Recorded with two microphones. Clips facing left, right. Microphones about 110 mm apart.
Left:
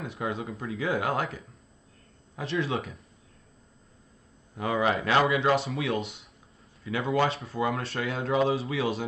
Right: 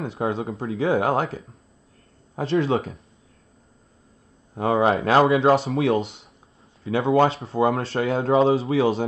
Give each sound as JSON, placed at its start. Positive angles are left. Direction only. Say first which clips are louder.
{"t": 0.0, "sound": "speech", "louder": "right 7 dB", "side_deg": -30}
{"t": 4.6, "sound": "speech", "louder": "right 7 dB", "side_deg": -35}